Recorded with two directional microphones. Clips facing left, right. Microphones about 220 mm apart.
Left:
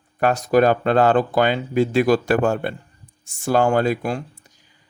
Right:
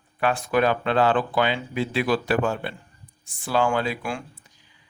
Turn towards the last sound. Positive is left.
turn(degrees=40)  # may be behind; listen again after turning